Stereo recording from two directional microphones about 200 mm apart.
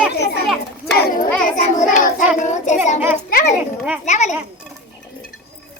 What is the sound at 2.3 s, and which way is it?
Child singing, 35° left (ahead or behind).